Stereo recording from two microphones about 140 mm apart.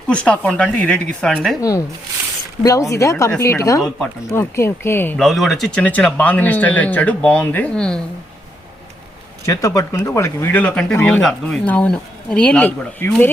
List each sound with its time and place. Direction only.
0.1 s speech: 10° left (ahead or behind)
2.6 s speech: 25° left (ahead or behind)
5.1 s speech: centre (ahead or behind)
9.5 s speech: 25° left (ahead or behind)